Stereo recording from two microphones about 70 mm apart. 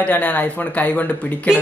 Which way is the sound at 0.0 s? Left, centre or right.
Left.